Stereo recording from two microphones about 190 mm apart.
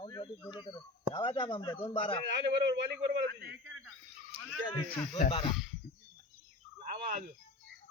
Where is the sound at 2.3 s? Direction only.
65° right (ahead or behind).